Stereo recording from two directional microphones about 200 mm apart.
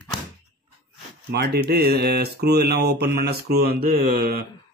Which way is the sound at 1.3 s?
55° right (ahead or behind).